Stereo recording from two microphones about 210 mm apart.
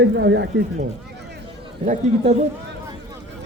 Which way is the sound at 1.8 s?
35° right (ahead or behind).